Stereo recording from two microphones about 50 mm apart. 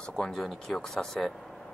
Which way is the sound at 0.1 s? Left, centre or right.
Centre.